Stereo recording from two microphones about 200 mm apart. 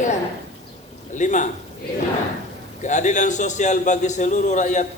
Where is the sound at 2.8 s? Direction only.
35° left (ahead or behind).